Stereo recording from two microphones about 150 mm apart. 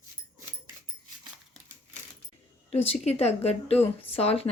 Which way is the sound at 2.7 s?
40° left (ahead or behind).